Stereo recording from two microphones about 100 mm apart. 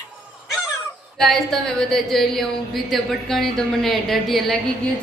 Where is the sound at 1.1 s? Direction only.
5° left (ahead or behind).